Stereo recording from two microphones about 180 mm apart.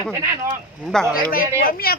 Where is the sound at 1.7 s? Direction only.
55° left (ahead or behind).